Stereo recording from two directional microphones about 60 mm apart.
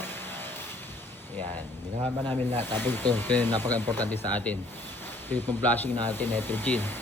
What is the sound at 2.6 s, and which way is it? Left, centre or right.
Speech, left.